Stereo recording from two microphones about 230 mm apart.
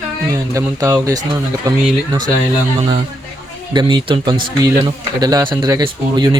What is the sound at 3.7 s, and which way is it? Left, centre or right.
Speech, centre.